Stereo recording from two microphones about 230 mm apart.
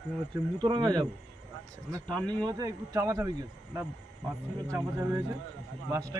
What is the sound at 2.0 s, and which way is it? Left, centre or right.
Speech, centre.